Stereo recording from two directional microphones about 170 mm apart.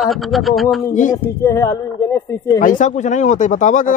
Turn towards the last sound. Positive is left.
turn(degrees=50)  # may be behind; listen again after turning